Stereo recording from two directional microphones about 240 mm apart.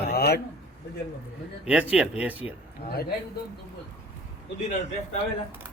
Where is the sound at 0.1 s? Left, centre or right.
Left.